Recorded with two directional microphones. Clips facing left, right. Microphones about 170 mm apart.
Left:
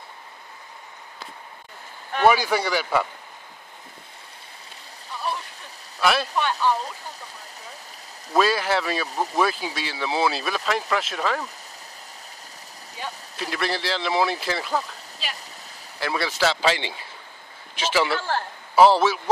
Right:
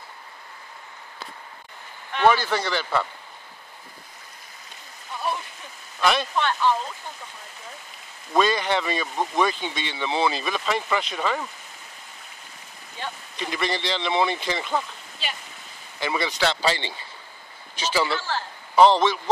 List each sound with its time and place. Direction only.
2.2 s speech: 10° left (ahead or behind)
5.9 s speech: 5° left (ahead or behind)
8.3 s speech: 5° left (ahead or behind)
13.0 s speech: centre (ahead or behind)
18.3 s a man's voice: 55° left (ahead or behind)
18.8 s speech: 5° left (ahead or behind)